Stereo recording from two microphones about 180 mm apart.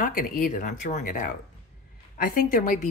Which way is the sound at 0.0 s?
50° left (ahead or behind).